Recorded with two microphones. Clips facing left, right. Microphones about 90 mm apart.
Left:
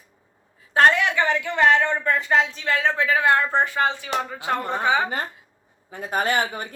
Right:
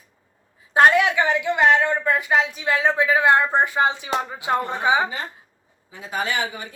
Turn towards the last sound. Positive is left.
turn(degrees=50)  # may be behind; listen again after turning